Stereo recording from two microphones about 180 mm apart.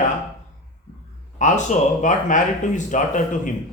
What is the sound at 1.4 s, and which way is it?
Speech, 45° left (ahead or behind).